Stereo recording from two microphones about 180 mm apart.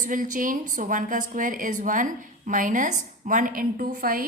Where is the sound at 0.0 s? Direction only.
45° right (ahead or behind).